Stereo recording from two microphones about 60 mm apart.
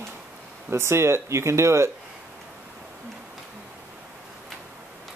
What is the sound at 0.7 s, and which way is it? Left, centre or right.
Speech, right.